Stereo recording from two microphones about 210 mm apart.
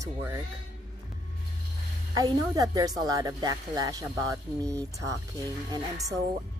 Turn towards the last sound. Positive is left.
turn(degrees=-15)  # may be behind; listen again after turning